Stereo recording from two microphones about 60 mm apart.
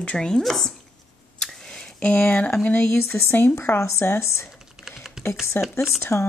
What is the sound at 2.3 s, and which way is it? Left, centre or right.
Speech, left.